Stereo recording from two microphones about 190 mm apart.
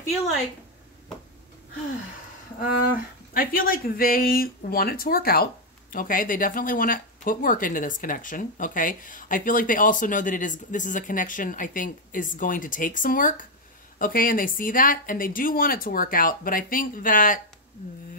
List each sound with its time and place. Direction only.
3.3 s speech: 50° left (ahead or behind)